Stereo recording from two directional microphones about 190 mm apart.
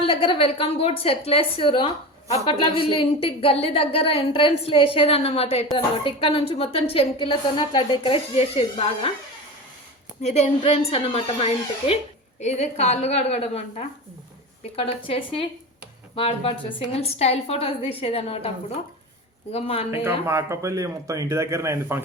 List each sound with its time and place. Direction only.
0.0 s a woman's voice: 30° left (ahead or behind)
10.2 s a woman's voice: 35° left (ahead or behind)
19.9 s speech: 15° right (ahead or behind)